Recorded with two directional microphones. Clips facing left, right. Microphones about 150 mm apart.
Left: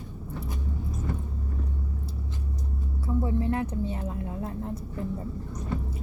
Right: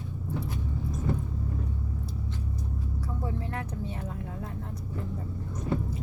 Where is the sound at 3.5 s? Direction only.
25° left (ahead or behind).